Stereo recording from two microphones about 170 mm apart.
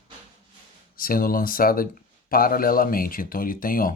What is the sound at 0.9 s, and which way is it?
Speech, 60° left (ahead or behind).